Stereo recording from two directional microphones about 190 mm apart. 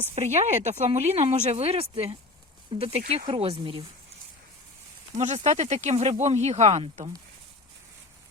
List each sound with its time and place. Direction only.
0.2 s speech: 35° right (ahead or behind)
5.1 s speech: 40° right (ahead or behind)